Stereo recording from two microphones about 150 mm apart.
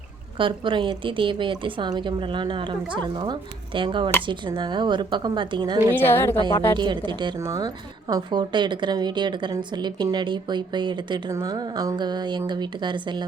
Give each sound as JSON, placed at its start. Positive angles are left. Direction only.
{"t": 0.3, "sound": "a woman's voice", "side_deg": -35}
{"t": 5.9, "sound": "a woman's voice", "side_deg": 15}
{"t": 6.7, "sound": "a woman's voice", "side_deg": -30}